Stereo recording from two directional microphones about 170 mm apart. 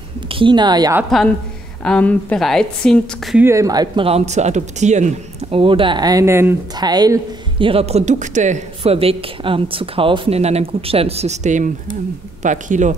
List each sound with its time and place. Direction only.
0.3 s speech: 30° right (ahead or behind)
1.9 s a woman's voice: 10° left (ahead or behind)
3.3 s speech: 15° right (ahead or behind); by 5.6 s 45° right (ahead or behind)
5.6 s speech: 30° right (ahead or behind); by 12.9 s 45° right (ahead or behind)